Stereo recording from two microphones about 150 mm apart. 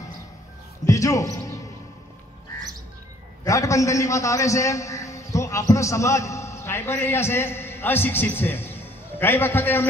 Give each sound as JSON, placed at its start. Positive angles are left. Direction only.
{"t": 0.8, "sound": "basketball bounce", "side_deg": 20}
{"t": 3.4, "sound": "a man's voice", "side_deg": 20}